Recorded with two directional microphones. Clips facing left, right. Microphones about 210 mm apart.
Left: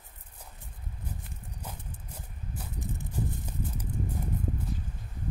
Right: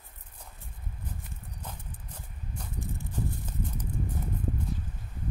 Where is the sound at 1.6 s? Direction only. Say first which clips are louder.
Left 1 dB; 10° left (ahead or behind).